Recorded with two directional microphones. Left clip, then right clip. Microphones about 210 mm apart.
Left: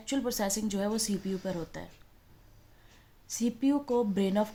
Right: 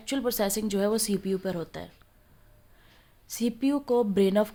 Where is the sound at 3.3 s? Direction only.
35° right (ahead or behind).